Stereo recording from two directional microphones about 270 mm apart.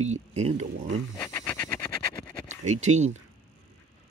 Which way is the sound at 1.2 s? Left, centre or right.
Centre.